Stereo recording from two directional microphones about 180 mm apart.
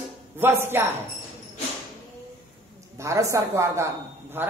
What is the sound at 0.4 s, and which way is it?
Speech, 10° right (ahead or behind).